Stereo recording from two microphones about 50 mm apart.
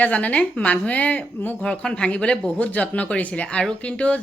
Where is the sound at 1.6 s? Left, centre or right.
Centre.